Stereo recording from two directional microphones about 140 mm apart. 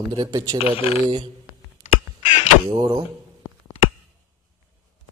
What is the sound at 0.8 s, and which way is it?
Speech, 45° left (ahead or behind).